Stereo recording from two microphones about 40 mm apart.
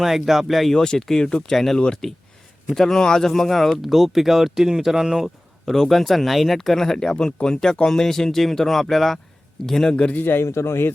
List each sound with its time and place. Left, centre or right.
0.0 s speech: centre
0.7 s speech: centre
5.6 s speech: centre
9.9 s a man's voice: left
10.2 s speech: left